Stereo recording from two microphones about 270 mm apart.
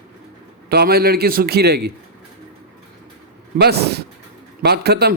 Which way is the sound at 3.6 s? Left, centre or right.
Right.